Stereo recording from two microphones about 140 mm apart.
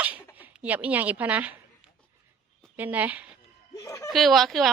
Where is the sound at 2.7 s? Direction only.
10° right (ahead or behind).